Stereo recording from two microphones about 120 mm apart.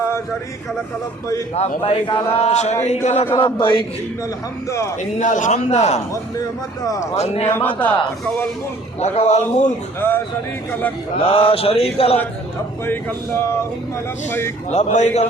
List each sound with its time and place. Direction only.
1.5 s a man's voice: 65° left (ahead or behind)
3.3 s mantra: 45° left (ahead or behind)
4.7 s speech: 25° left (ahead or behind)
5.2 s a man's voice: 90° left
5.6 s a man's voice: 70° left (ahead or behind)
6.8 s speech: 30° left (ahead or behind)
7.2 s speech: 60° left (ahead or behind)
7.5 s a man's voice: 15° left (ahead or behind)
9.1 s a man's voice: 70° left (ahead or behind)
9.6 s a man's voice: 15° left (ahead or behind)
11.3 s mantra: 50° left (ahead or behind)
11.9 s speech: 55° left (ahead or behind)
12.8 s speech: 20° left (ahead or behind)
14.7 s a man's voice: 70° left (ahead or behind)